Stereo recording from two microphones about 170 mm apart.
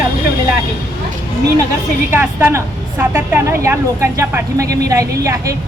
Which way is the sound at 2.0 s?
15° right (ahead or behind).